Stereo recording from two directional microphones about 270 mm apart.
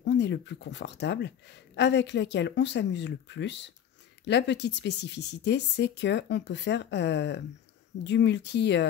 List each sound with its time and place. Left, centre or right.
0.0 s speech: left